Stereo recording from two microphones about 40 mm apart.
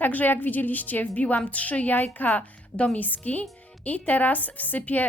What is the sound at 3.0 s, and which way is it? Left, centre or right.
Speech, left.